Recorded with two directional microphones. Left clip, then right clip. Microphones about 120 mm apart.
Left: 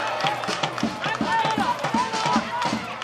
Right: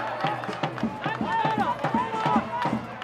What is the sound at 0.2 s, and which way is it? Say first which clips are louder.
Music: left 4 dB; 35° left (ahead or behind).